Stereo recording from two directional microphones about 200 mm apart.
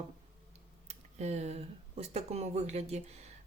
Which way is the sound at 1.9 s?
30° right (ahead or behind).